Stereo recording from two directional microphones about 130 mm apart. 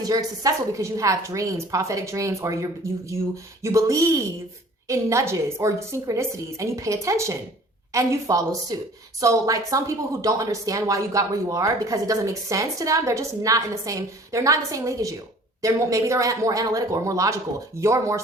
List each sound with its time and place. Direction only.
0.0 s speech: 30° right (ahead or behind)